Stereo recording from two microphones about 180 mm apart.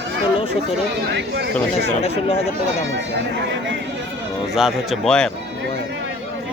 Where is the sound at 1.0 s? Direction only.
70° right (ahead or behind).